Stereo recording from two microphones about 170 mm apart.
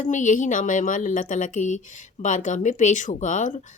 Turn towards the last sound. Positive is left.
turn(degrees=45)  # may be behind; listen again after turning